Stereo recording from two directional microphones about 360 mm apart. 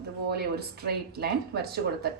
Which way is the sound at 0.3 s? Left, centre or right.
Right.